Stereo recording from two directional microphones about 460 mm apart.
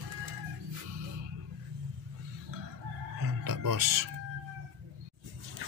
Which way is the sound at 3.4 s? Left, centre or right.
Right.